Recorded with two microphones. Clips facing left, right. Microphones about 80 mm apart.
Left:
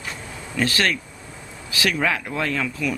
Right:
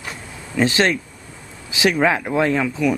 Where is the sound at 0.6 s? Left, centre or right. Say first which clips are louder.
Right 5 dB; right.